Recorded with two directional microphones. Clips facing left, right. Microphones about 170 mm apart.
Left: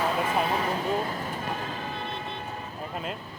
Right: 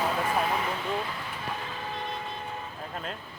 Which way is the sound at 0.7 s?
40° left (ahead or behind).